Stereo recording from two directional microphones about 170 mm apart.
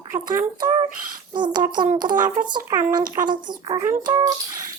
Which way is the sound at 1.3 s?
25° right (ahead or behind).